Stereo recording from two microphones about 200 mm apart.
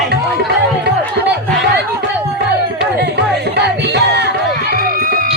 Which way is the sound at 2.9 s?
55° right (ahead or behind).